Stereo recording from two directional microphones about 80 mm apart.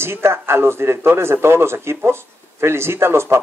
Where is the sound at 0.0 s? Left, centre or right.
Right.